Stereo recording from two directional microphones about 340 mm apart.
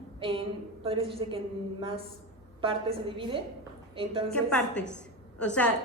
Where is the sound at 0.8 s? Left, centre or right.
Centre.